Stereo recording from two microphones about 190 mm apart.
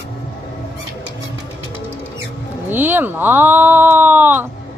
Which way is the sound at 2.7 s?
10° right (ahead or behind).